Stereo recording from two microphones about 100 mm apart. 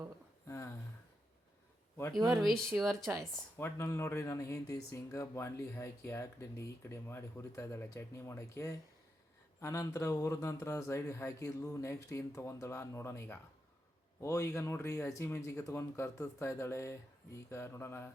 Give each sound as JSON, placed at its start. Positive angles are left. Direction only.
{"t": 0.4, "sound": "a sound", "side_deg": 30}
{"t": 2.4, "sound": "speech", "side_deg": 5}
{"t": 3.6, "sound": "speech", "side_deg": 30}